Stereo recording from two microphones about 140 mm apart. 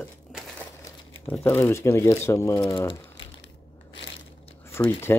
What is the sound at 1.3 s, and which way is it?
Speech, 15° left (ahead or behind).